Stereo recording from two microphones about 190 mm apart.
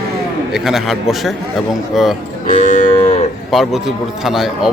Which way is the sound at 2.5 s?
40° left (ahead or behind).